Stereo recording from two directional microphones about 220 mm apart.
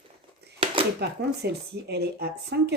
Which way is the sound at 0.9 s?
45° right (ahead or behind).